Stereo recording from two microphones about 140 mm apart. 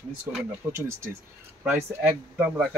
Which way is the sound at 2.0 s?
10° right (ahead or behind).